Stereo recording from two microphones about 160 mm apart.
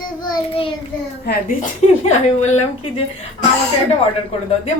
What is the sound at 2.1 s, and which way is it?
Speech, 45° left (ahead or behind).